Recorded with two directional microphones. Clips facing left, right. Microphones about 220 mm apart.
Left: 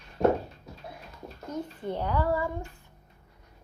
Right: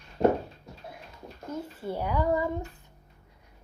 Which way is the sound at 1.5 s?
5° right (ahead or behind).